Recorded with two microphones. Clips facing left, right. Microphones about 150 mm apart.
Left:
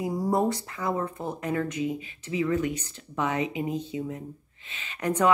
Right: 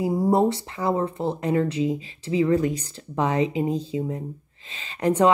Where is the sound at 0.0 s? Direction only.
25° right (ahead or behind).